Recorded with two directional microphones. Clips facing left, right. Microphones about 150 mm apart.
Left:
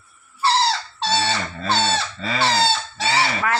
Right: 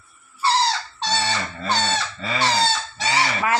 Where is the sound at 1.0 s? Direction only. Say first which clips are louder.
Left 2 dB; 30° left (ahead or behind).